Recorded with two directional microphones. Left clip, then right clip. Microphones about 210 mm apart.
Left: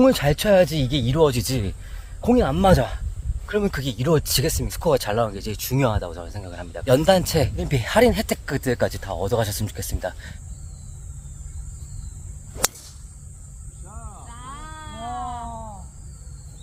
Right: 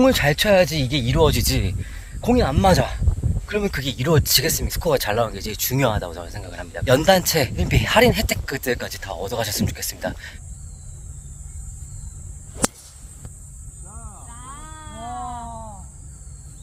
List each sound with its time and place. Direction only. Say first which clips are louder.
0.0 s speech: right 1 dB; 5° left (ahead or behind)
12.6 s whip: even; centre (ahead or behind)
13.9 s sheep: left 1 dB; 50° left (ahead or behind)